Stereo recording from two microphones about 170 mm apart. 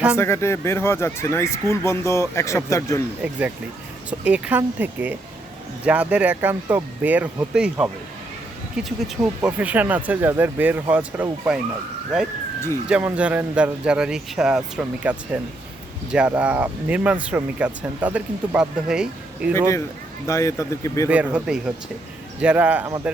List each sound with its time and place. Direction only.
0.2 s speech: 15° left (ahead or behind)
4.2 s speech: 5° right (ahead or behind)
12.9 s speech: 10° right (ahead or behind)
19.5 s speech: 15° left (ahead or behind)
21.1 s speech: 10° right (ahead or behind)